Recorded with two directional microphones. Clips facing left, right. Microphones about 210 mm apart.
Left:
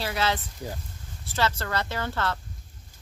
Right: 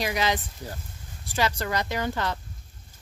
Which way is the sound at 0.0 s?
15° right (ahead or behind).